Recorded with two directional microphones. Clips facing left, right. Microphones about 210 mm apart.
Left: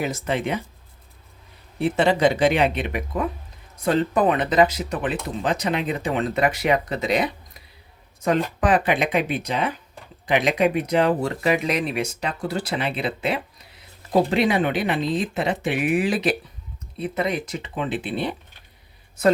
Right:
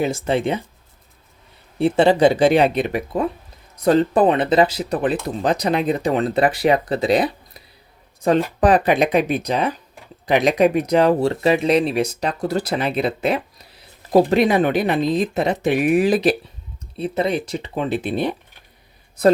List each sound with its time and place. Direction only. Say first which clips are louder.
0.0 s speech: right 5 dB; 30° right (ahead or behind)
1.8 s speech: right 5 dB; 30° right (ahead or behind)